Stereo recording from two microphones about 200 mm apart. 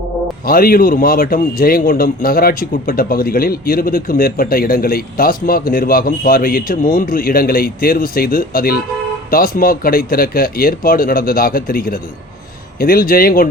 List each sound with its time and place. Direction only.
0.4 s speech: 50° left (ahead or behind)